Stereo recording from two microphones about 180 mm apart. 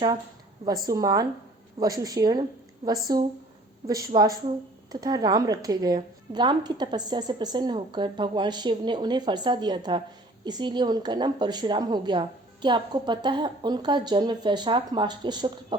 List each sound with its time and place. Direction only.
0.6 s speech: 20° right (ahead or behind)